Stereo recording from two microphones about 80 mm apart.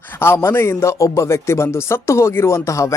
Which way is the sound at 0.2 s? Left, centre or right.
Left.